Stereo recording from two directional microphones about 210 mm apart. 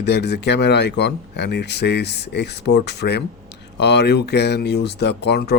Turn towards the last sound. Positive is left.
turn(degrees=50)  # may be behind; listen again after turning